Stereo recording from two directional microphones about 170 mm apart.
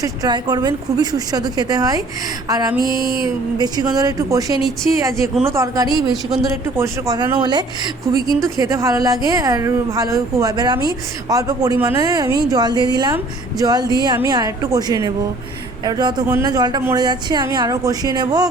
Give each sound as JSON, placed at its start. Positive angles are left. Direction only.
{"t": 0.0, "sound": "a woman's voice", "side_deg": -25}
{"t": 8.6, "sound": "a woman's voice", "side_deg": -20}